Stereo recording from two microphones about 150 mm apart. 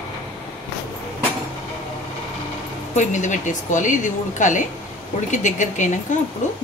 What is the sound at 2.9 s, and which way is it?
Speech, 55° left (ahead or behind).